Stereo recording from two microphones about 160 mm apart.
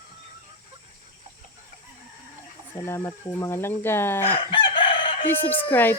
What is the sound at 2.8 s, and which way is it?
Speech, 15° left (ahead or behind).